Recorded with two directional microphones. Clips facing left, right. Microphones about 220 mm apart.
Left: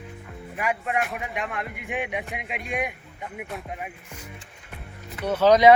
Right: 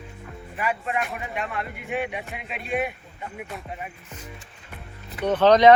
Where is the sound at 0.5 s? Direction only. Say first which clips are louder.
Left 1 dB; 15° left (ahead or behind).